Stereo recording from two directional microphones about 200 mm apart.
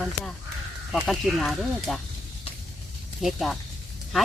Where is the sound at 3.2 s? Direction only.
Centre (ahead or behind).